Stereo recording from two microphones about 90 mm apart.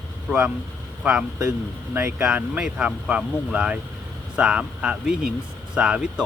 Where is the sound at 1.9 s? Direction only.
25° right (ahead or behind).